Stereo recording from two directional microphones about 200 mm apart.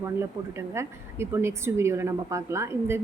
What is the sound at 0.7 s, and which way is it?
A woman's voice, 15° right (ahead or behind).